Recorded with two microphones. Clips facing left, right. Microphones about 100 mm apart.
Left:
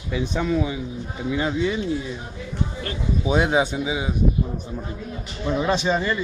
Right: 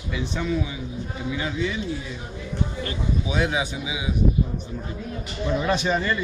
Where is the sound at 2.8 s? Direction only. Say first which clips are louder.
Left 3 dB; 40° left (ahead or behind).